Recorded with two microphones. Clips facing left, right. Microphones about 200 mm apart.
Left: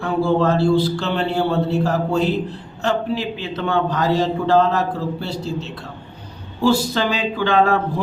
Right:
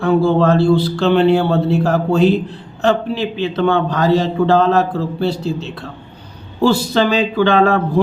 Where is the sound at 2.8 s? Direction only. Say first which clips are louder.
Right 5 dB; 70° right (ahead or behind).